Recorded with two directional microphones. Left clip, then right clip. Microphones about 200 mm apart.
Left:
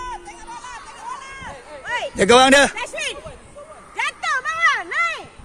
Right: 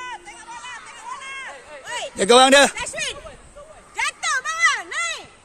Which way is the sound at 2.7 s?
25° right (ahead or behind).